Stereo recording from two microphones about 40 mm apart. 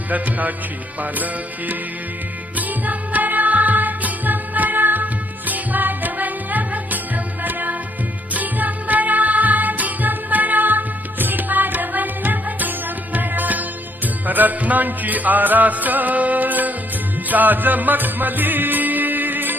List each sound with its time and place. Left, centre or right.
0.1 s music: right